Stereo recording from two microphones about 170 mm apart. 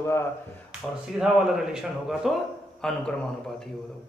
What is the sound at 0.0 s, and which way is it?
Speech, 15° left (ahead or behind).